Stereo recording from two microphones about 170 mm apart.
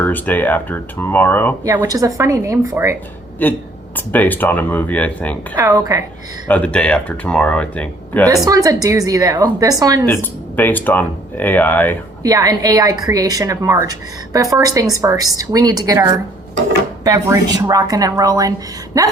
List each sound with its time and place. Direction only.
0.0 s speech: 10° left (ahead or behind)
1.6 s a woman's voice: 15° right (ahead or behind)
3.4 s speech: 10° left (ahead or behind)
5.5 s a woman's voice: 20° right (ahead or behind)
6.5 s speech: 5° left (ahead or behind)
8.4 s a woman's voice: 20° right (ahead or behind)
10.1 s speech: 15° left (ahead or behind)
12.2 s a woman's voice: 20° right (ahead or behind)